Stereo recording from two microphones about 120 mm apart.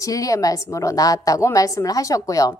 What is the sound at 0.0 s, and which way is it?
A woman's voice, 30° left (ahead or behind).